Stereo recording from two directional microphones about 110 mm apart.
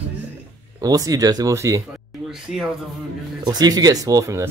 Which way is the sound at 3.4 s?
40° right (ahead or behind).